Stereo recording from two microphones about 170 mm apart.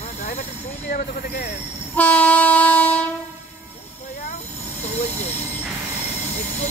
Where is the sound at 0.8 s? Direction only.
60° left (ahead or behind).